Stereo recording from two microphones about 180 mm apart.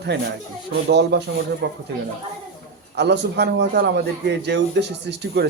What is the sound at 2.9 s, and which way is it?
A man's voice, 70° right (ahead or behind).